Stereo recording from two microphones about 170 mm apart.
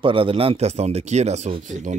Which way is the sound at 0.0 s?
30° right (ahead or behind).